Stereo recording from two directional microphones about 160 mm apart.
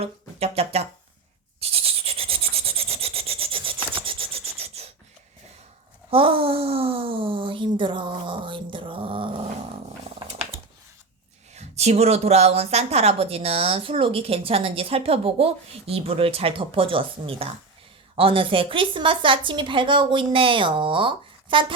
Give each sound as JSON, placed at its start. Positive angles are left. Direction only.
{"t": 0.0, "sound": "speech", "side_deg": -40}
{"t": 1.6, "sound": "rub", "side_deg": -40}
{"t": 4.8, "sound": "a sound", "side_deg": -40}
{"t": 6.1, "sound": "a woman's voice", "side_deg": -35}
{"t": 11.5, "sound": "speech", "side_deg": -40}